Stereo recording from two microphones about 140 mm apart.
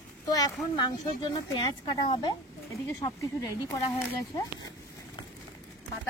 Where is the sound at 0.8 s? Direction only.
25° left (ahead or behind).